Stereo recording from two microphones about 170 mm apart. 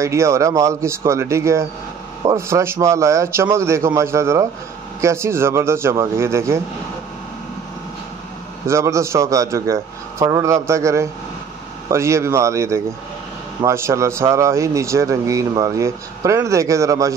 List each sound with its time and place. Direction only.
0.0 s speech: 15° right (ahead or behind)
8.6 s speech: 15° right (ahead or behind)